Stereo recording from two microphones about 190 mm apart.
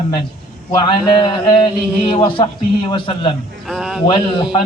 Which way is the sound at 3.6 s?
Centre (ahead or behind).